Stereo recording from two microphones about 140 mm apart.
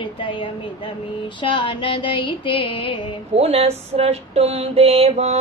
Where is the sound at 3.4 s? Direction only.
45° right (ahead or behind).